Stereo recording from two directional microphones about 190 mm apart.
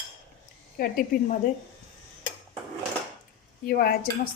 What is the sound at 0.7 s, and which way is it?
Speech, 50° left (ahead or behind).